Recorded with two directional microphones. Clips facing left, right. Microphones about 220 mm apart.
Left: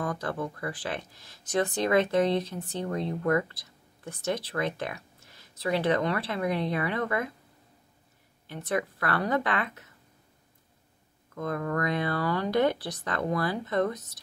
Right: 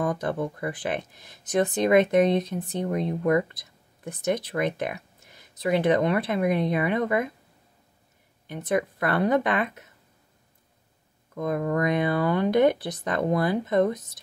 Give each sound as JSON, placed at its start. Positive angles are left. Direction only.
{"t": 0.0, "sound": "speech", "side_deg": -20}
{"t": 8.5, "sound": "speech", "side_deg": -20}
{"t": 11.3, "sound": "speech", "side_deg": -20}